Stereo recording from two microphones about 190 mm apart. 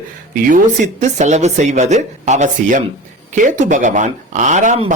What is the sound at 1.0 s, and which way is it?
Speech, 40° right (ahead or behind).